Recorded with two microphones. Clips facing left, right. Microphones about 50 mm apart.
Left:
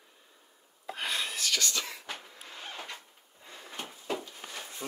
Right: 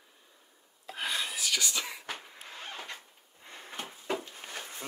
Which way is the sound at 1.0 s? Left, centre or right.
Centre.